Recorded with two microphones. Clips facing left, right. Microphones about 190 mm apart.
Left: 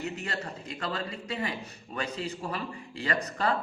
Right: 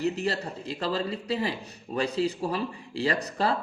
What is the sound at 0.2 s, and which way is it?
Speech, 35° right (ahead or behind).